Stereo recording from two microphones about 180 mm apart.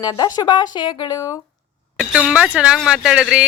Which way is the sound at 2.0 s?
5° right (ahead or behind).